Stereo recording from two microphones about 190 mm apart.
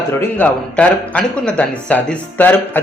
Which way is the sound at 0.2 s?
10° left (ahead or behind).